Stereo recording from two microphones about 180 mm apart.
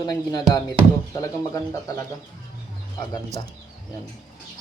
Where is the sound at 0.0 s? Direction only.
25° left (ahead or behind).